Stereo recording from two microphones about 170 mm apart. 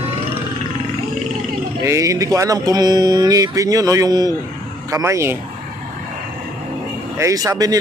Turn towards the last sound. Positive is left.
turn(degrees=-20)  # may be behind; listen again after turning